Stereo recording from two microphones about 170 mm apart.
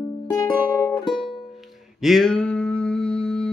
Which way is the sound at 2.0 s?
Centre (ahead or behind).